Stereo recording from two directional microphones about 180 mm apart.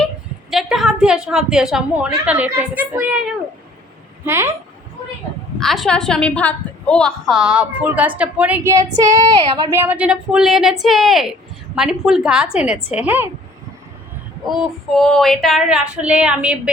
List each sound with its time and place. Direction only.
0.5 s a woman's voice: centre (ahead or behind)
5.5 s a woman's voice: centre (ahead or behind)
9.0 s child singing: 20° right (ahead or behind)
9.7 s a woman's voice: 10° right (ahead or behind)
14.4 s a woman's voice: centre (ahead or behind)